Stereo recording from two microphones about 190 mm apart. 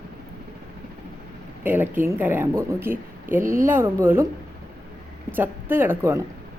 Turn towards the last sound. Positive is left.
turn(degrees=-10)  # may be behind; listen again after turning